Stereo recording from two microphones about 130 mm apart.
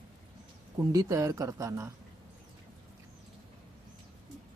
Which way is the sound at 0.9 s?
25° right (ahead or behind).